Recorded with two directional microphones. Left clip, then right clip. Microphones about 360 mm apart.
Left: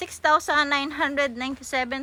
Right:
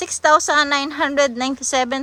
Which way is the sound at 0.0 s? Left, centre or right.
Centre.